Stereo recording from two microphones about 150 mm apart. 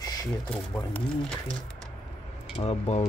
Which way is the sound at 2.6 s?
45° left (ahead or behind).